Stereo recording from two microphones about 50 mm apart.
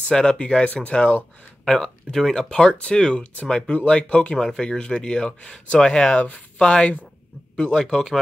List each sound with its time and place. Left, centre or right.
0.1 s speech: centre
6.1 s speech: left
6.6 s speech: centre